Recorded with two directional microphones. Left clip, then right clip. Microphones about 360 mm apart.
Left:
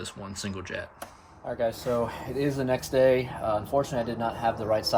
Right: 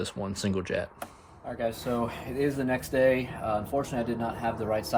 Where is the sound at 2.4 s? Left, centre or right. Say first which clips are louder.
Left 1 dB; centre.